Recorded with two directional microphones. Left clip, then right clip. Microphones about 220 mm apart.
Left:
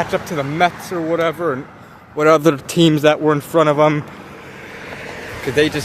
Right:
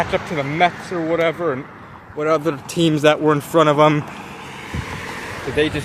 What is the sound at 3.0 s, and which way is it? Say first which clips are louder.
Speech: left 1 dB; 5° left (ahead or behind).